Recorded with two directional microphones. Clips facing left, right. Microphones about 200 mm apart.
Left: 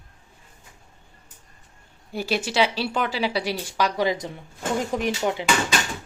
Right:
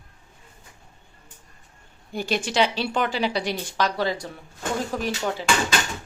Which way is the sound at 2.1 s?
5° left (ahead or behind).